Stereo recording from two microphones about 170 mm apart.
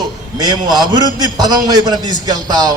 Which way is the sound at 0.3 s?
25° right (ahead or behind).